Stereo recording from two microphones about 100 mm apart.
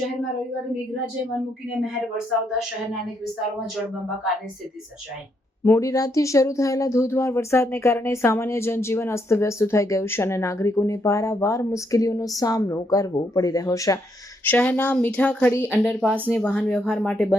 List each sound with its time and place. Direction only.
2.1 s speech: 5° right (ahead or behind)
5.6 s speech: 30° left (ahead or behind)
14.4 s speech: 15° left (ahead or behind)
15.8 s speech: 5° left (ahead or behind)
16.2 s speech: 20° left (ahead or behind)